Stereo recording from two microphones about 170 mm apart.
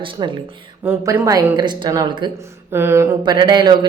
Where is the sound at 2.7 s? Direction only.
15° right (ahead or behind).